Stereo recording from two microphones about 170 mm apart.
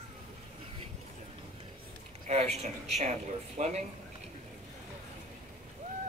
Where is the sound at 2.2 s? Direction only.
40° right (ahead or behind).